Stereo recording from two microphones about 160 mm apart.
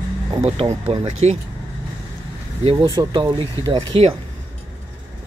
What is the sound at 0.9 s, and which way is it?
Speech, 35° right (ahead or behind).